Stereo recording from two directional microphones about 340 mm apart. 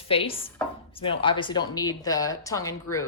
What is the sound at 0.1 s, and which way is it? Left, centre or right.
A woman's voice, centre.